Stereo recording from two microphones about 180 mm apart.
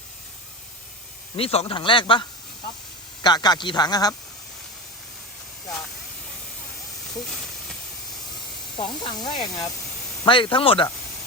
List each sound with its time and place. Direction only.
1.4 s speech: 30° left (ahead or behind)
7.3 s hiss: 5° left (ahead or behind)
8.7 s speech: 25° left (ahead or behind)